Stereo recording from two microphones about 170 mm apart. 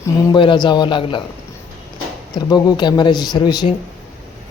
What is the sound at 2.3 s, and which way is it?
Speech, 25° left (ahead or behind).